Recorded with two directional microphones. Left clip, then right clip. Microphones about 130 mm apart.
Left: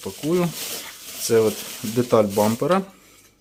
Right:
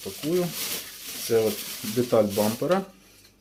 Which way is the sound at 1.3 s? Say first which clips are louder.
Left 5 dB; 40° left (ahead or behind).